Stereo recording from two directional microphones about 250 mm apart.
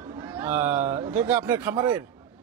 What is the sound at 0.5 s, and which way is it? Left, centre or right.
A man's voice, centre.